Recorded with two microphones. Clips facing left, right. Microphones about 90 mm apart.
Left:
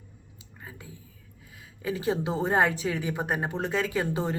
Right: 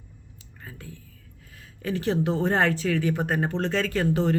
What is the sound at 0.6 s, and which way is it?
Whispering, 15° left (ahead or behind).